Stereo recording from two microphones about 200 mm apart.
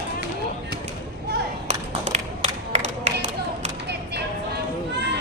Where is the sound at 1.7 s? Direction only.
35° right (ahead or behind).